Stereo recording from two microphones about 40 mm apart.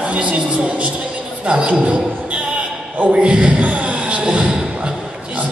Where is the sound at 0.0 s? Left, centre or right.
Right.